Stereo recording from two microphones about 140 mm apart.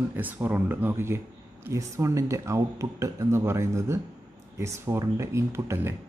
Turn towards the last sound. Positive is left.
turn(degrees=-20)  # may be behind; listen again after turning